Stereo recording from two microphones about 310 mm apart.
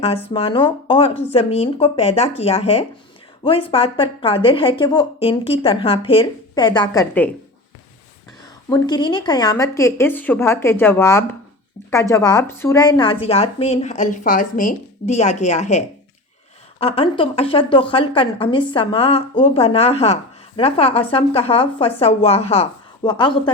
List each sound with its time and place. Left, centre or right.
0.0 s a woman's voice: centre
8.7 s a woman's voice: centre
16.8 s a woman's voice: centre